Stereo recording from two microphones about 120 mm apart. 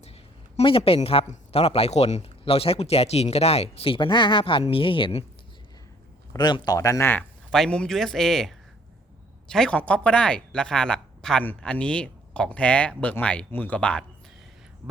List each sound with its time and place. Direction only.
0.5 s speech: 55° left (ahead or behind)
2.4 s speech: 55° left (ahead or behind)
6.3 s speech: 35° left (ahead or behind); by 7.3 s 20° left (ahead or behind)
7.5 s speech: 5° left (ahead or behind)